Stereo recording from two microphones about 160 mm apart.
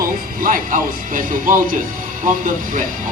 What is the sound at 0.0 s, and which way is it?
Speech, 60° right (ahead or behind).